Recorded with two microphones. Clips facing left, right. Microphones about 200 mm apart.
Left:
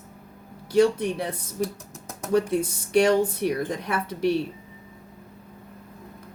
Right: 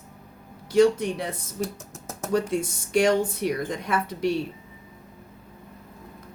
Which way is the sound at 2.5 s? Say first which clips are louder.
Left 2 dB; 60° left (ahead or behind).